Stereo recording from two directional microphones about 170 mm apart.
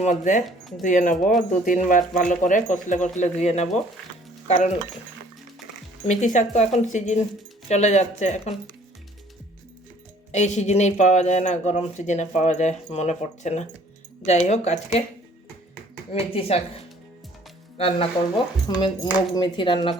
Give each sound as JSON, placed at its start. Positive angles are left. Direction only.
{"t": 0.0, "sound": "speech", "side_deg": 45}
{"t": 6.1, "sound": "speech", "side_deg": 45}
{"t": 10.3, "sound": "speech", "side_deg": 45}
{"t": 16.1, "sound": "speech", "side_deg": 35}
{"t": 17.7, "sound": "speech", "side_deg": 35}